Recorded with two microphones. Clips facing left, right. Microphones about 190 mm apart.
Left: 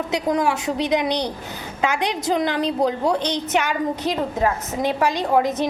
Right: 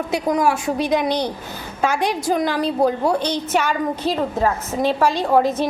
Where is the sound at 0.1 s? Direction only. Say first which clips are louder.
Right 2 dB; 20° left (ahead or behind).